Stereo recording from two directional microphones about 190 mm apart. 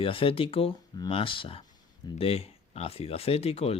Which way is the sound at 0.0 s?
30° left (ahead or behind).